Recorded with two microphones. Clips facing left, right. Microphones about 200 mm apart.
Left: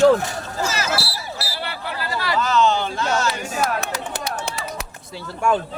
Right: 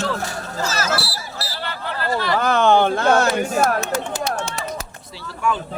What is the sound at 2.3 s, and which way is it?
Speech, 55° right (ahead or behind).